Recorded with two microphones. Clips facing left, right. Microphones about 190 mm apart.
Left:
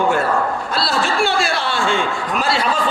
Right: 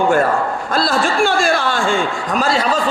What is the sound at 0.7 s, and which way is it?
A man's voice, 45° right (ahead or behind).